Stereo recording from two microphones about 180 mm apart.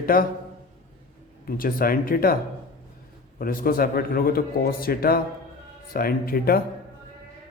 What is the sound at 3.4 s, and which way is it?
Speech, 55° left (ahead or behind).